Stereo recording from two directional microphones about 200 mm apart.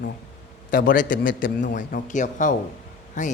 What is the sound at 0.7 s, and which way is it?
A man's voice, 45° left (ahead or behind).